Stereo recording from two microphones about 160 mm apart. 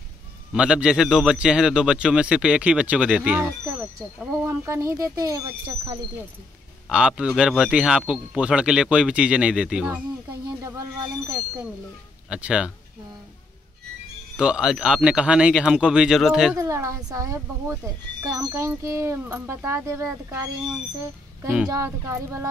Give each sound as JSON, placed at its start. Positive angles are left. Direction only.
{"t": 0.5, "sound": "a man's voice", "side_deg": -5}
{"t": 6.9, "sound": "a man's voice", "side_deg": -5}
{"t": 10.6, "sound": "speech", "side_deg": -20}
{"t": 12.3, "sound": "speech", "side_deg": -5}
{"t": 14.3, "sound": "a man's voice", "side_deg": -5}
{"t": 16.5, "sound": "a child's voice", "side_deg": -20}
{"t": 21.6, "sound": "speech", "side_deg": -20}